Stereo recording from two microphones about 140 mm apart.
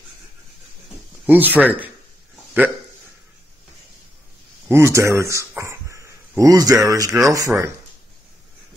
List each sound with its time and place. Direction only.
1.2 s speech: 10° right (ahead or behind)
4.6 s speech: 20° right (ahead or behind)